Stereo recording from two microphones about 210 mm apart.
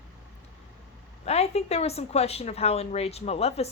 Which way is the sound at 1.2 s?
30° left (ahead or behind).